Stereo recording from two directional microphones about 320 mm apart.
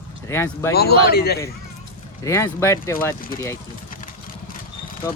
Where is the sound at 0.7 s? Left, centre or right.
Left.